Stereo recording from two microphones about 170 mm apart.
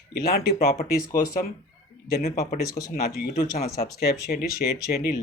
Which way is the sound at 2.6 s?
20° left (ahead or behind).